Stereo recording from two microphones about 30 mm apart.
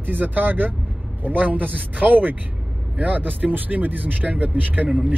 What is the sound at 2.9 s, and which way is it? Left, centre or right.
Speech, right.